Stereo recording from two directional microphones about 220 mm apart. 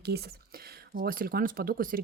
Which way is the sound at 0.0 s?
45° right (ahead or behind).